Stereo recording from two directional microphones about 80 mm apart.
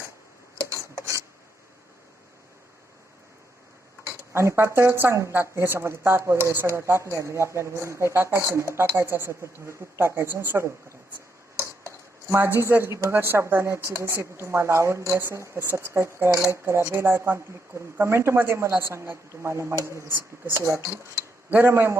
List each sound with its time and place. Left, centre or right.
0.7 s filing: right
4.3 s a woman's voice: right
12.3 s a woman's voice: right